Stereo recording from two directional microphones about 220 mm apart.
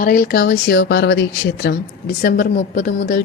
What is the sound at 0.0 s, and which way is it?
Speech, 40° left (ahead or behind).